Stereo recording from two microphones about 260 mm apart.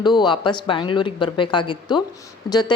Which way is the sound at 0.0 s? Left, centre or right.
Centre.